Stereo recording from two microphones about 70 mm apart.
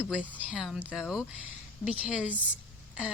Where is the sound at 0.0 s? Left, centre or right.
Centre.